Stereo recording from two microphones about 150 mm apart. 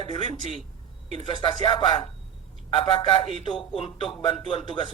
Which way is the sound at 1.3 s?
35° left (ahead or behind).